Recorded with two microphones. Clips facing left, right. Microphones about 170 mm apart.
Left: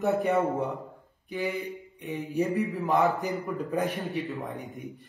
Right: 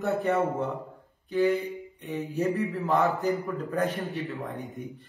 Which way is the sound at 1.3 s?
15° left (ahead or behind).